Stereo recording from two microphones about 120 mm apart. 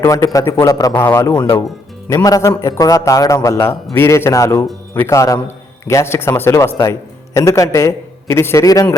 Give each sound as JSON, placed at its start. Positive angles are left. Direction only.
{"t": 0.0, "sound": "a man's voice", "side_deg": 30}
{"t": 1.3, "sound": "a man's voice", "side_deg": 35}